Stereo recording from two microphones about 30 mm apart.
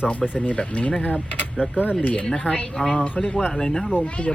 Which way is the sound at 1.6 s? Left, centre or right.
Right.